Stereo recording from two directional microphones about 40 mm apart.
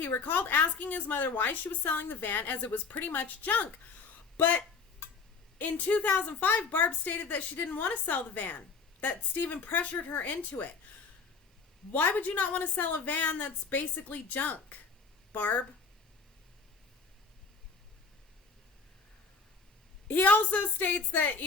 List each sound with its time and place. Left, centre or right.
0.0 s a woman's voice: left
11.9 s a woman's voice: left
13.9 s a woman's voice: left
20.1 s a woman's voice: left